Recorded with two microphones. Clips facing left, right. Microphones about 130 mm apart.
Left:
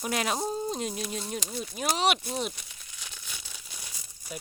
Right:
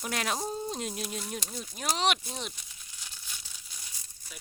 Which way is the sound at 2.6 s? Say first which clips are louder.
Left 3 dB; 70° left (ahead or behind).